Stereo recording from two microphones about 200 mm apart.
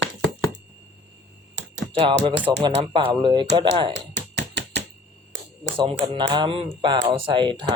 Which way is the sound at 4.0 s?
60° right (ahead or behind).